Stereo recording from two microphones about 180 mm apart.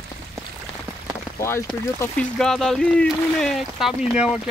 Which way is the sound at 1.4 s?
15° left (ahead or behind).